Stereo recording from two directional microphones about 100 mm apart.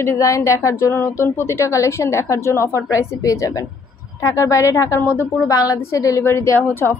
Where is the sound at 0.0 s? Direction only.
30° left (ahead or behind).